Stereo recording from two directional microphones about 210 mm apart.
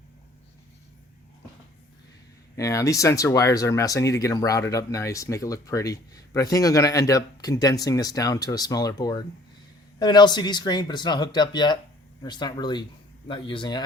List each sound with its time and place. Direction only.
2.6 s speech: 15° left (ahead or behind)